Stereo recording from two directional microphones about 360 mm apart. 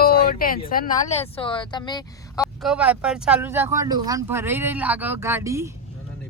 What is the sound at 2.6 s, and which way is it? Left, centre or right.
Speech, centre.